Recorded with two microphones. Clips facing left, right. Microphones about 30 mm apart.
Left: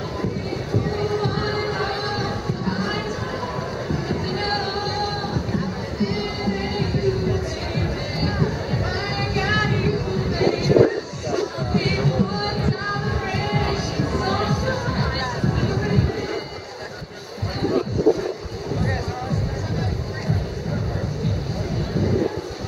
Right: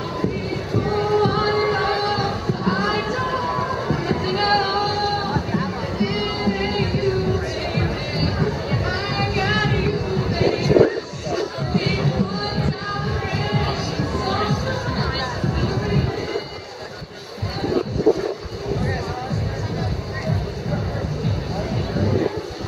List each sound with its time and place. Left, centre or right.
0.8 s a sound: right
4.9 s music: right
11.6 s chatter: centre
12.2 s music: centre